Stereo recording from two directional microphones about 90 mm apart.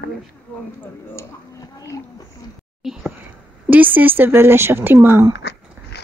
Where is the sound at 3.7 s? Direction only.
20° right (ahead or behind).